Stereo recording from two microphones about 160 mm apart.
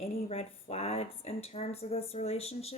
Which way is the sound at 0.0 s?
40° left (ahead or behind).